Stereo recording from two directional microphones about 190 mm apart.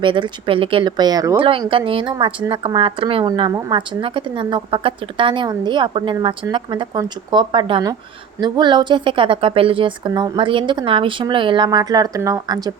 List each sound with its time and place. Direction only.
0.0 s speech: 25° right (ahead or behind)